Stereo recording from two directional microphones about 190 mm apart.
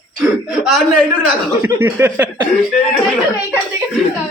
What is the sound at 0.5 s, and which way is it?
A man's voice, centre (ahead or behind).